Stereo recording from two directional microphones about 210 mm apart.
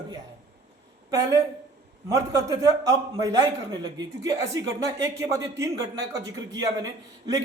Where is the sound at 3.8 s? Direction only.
20° right (ahead or behind).